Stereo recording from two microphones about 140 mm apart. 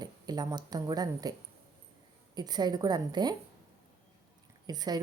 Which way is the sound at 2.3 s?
30° right (ahead or behind).